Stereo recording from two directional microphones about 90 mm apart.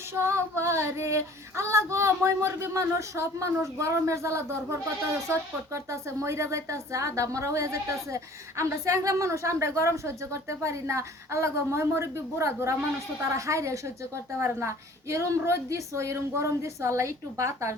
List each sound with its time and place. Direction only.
0.1 s female singing: 30° right (ahead or behind)
14.3 s a woman's voice: 30° right (ahead or behind)
15.1 s female singing: 30° right (ahead or behind)